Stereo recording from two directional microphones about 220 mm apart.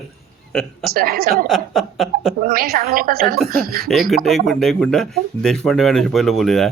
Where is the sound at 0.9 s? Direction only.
40° right (ahead or behind).